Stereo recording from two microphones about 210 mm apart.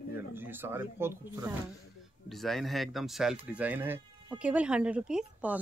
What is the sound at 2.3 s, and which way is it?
Speech, centre (ahead or behind).